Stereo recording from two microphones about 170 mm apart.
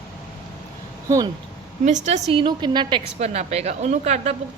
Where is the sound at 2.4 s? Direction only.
25° right (ahead or behind).